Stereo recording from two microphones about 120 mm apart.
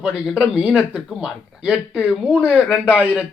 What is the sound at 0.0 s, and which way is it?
Speech, 5° right (ahead or behind).